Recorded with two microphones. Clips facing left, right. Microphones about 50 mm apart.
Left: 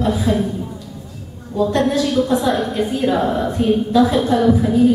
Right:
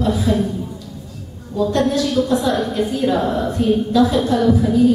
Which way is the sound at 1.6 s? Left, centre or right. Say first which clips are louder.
Left 1 dB; centre.